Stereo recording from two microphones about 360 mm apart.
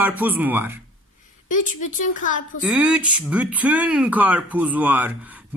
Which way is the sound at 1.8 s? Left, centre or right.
Left.